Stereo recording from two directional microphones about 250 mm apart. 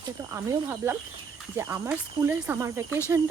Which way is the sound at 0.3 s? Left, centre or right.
Centre.